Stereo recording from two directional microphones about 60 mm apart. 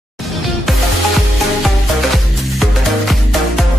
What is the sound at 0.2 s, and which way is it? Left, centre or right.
Music, centre.